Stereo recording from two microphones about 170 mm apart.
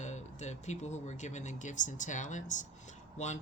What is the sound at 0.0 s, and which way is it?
Speech, 45° left (ahead or behind).